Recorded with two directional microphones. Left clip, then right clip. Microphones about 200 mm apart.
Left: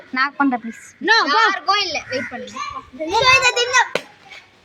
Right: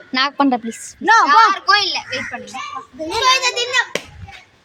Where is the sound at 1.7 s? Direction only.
55° right (ahead or behind).